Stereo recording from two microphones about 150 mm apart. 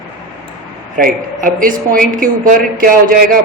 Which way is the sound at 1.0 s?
70° right (ahead or behind).